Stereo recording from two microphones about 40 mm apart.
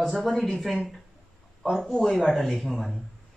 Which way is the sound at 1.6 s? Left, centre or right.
Centre.